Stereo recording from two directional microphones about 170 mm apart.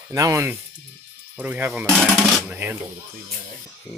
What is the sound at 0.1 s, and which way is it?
Speech, 20° right (ahead or behind).